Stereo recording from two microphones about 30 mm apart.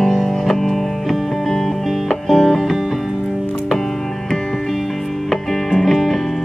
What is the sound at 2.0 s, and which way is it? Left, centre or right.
Music, centre.